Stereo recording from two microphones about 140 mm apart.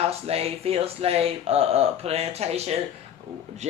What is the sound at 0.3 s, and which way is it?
Speech, 45° right (ahead or behind).